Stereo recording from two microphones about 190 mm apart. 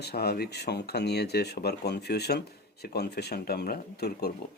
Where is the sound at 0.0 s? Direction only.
55° left (ahead or behind).